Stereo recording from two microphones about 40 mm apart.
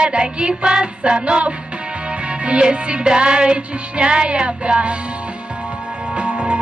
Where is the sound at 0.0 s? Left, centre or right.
Right.